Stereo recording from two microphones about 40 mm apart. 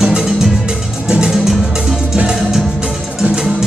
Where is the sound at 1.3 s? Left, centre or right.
Centre.